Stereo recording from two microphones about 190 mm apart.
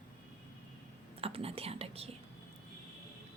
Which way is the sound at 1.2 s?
30° right (ahead or behind).